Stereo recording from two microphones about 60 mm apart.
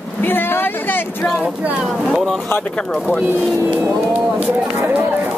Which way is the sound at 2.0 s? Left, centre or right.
Centre.